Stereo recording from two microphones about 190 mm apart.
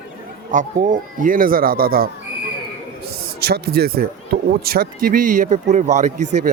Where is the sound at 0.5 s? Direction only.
45° right (ahead or behind).